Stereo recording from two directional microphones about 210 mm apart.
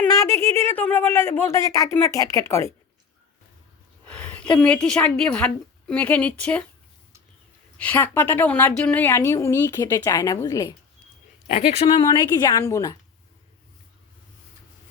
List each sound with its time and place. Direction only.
0.0 s a woman's voice: 15° left (ahead or behind)
4.0 s a woman's voice: 5° left (ahead or behind)
7.8 s a woman's voice: 10° left (ahead or behind)
11.4 s speech: 30° left (ahead or behind)